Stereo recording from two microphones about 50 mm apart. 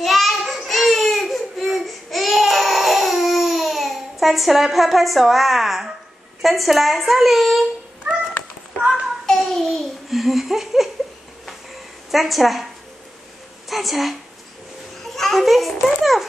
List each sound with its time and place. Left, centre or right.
0.0 s child singing: centre
0.5 s baby cry: centre
6.4 s a woman's voice: centre
9.2 s babbling: centre
12.1 s a woman's voice: centre
13.7 s a woman's voice: centre